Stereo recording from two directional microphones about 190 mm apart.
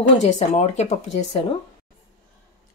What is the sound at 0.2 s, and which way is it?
Speech, 35° left (ahead or behind).